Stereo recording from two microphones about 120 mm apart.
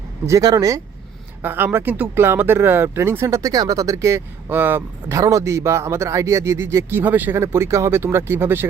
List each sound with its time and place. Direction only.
0.3 s speech: 30° right (ahead or behind)
1.4 s speech: 15° right (ahead or behind)